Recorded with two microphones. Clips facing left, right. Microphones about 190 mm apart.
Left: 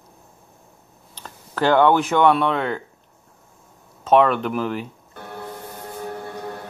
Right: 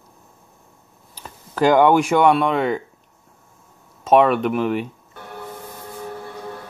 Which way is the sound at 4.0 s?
10° right (ahead or behind).